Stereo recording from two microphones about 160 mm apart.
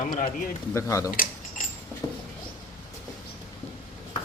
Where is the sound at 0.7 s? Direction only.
20° left (ahead or behind).